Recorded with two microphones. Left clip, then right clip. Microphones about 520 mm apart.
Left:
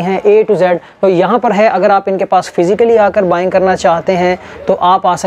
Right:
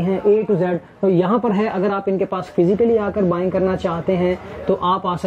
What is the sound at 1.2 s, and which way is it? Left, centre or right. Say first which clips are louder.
Speech: left 10 dB; left.